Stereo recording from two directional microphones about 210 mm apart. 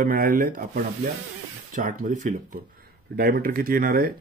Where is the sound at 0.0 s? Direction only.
40° right (ahead or behind).